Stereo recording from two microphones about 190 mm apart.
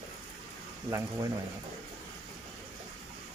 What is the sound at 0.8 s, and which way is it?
Speech, 15° right (ahead or behind).